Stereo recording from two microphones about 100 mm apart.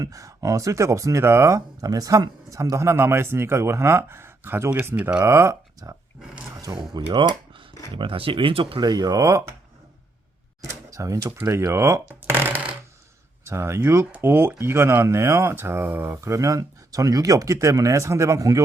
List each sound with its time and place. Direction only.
0.0 s speech: 35° right (ahead or behind)
6.9 s speech: 50° right (ahead or behind)
7.9 s speech: 60° right (ahead or behind)
8.8 s speech: 40° right (ahead or behind)
10.7 s speech: 35° right (ahead or behind)